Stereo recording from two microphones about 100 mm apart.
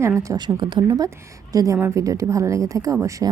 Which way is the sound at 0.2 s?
35° right (ahead or behind).